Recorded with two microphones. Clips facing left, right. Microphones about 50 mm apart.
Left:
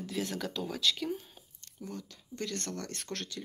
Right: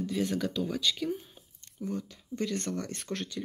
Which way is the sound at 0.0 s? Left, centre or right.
Centre.